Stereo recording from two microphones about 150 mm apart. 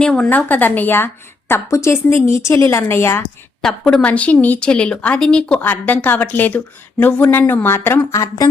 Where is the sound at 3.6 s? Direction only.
5° left (ahead or behind).